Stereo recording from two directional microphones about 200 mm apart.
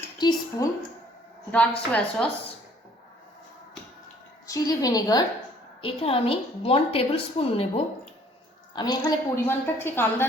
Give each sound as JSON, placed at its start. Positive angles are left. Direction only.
{"t": 0.2, "sound": "a woman's voice", "side_deg": 20}
{"t": 1.5, "sound": "a woman's voice", "side_deg": 5}
{"t": 4.4, "sound": "a woman's voice", "side_deg": 15}
{"t": 8.7, "sound": "a woman's voice", "side_deg": 20}